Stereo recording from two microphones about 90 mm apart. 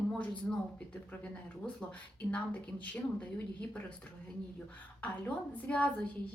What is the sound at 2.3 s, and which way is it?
Speech, 15° left (ahead or behind).